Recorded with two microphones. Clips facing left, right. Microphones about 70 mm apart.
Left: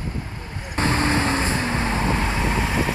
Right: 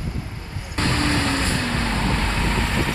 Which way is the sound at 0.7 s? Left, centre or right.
Left.